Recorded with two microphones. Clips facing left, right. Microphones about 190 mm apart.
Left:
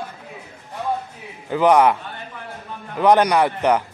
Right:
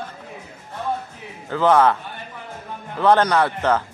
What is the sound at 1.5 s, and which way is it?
Speech, 15° left (ahead or behind).